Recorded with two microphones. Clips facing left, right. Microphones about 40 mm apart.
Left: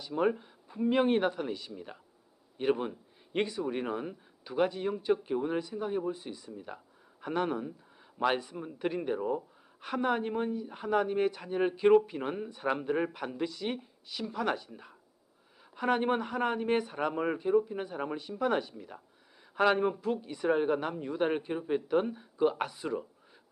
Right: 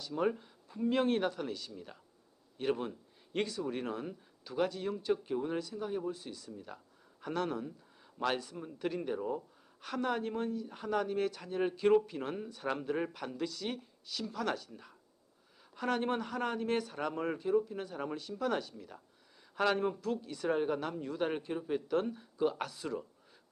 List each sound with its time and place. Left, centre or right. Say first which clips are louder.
0.0 s speech: left 4 dB; centre